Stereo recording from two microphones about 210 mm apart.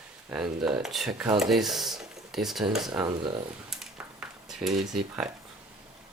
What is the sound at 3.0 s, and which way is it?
Speech, 25° right (ahead or behind).